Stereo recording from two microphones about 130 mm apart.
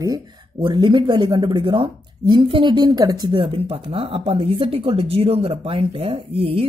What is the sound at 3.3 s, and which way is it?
Speech, 45° right (ahead or behind).